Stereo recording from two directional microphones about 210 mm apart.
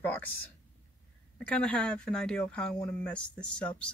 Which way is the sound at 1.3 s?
5° left (ahead or behind).